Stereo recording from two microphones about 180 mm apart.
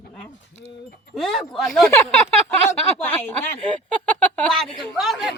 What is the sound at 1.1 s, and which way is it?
Speech, centre (ahead or behind).